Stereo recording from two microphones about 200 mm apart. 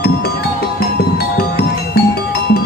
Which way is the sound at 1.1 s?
50° left (ahead or behind).